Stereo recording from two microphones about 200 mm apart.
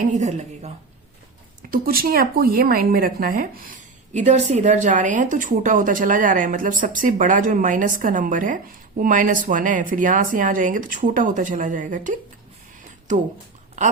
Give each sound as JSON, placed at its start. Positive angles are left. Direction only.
{"t": 0.0, "sound": "a woman's voice", "side_deg": -35}
{"t": 1.7, "sound": "a woman's voice", "side_deg": -45}